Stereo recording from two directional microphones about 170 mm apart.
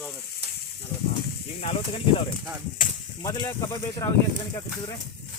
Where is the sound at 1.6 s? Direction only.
35° left (ahead or behind).